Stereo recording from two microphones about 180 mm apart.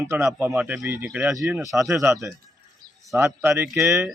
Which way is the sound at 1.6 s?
15° right (ahead or behind).